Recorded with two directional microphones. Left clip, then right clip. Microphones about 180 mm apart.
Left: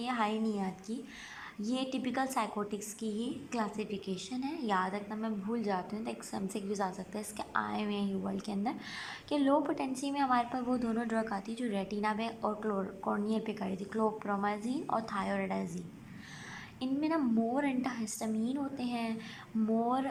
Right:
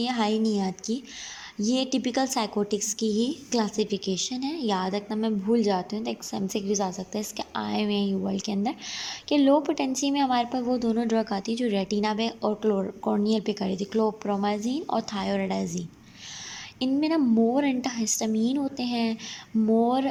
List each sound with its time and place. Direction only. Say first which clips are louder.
0.0 s a woman's voice: right 7 dB; 30° right (ahead or behind)
16.8 s a woman's voice: right 8 dB; 25° right (ahead or behind)